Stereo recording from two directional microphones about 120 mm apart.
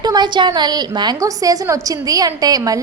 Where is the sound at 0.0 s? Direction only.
35° right (ahead or behind).